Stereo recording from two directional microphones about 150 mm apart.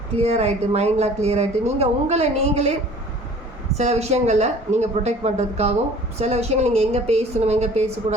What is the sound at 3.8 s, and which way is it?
A woman's voice, 45° right (ahead or behind).